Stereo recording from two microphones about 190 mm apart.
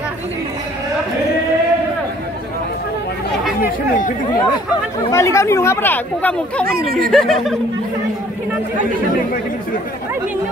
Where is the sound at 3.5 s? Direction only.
50° left (ahead or behind).